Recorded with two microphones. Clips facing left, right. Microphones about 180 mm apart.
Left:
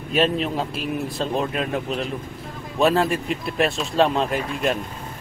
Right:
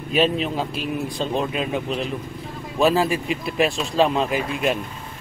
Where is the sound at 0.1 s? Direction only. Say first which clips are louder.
Even; centre (ahead or behind).